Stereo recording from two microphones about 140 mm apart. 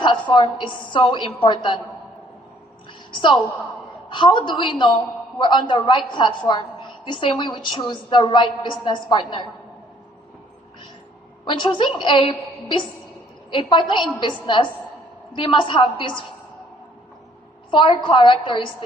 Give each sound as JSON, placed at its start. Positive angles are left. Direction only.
{"t": 0.0, "sound": "a woman's voice", "side_deg": 35}
{"t": 3.1, "sound": "a woman's voice", "side_deg": 40}
{"t": 11.4, "sound": "a woman's voice", "side_deg": 35}
{"t": 17.7, "sound": "a woman's voice", "side_deg": 35}